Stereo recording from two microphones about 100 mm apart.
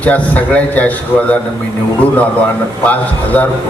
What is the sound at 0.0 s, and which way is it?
A man's voice, 15° left (ahead or behind).